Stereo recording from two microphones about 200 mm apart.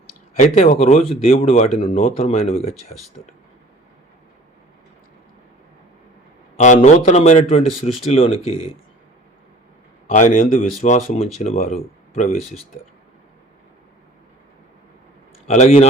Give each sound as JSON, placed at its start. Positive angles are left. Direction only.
{"t": 0.3, "sound": "speech", "side_deg": 35}
{"t": 6.6, "sound": "speech", "side_deg": 35}
{"t": 10.1, "sound": "speech", "side_deg": 40}
{"t": 15.4, "sound": "speech", "side_deg": 35}